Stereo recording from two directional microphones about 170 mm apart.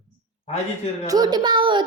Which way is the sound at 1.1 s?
25° right (ahead or behind).